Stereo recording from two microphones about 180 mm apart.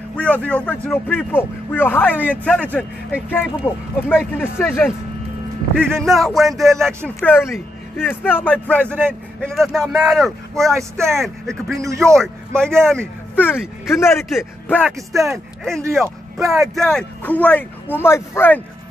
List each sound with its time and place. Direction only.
0.1 s a man's voice: 5° left (ahead or behind)
15.1 s a man's voice: centre (ahead or behind)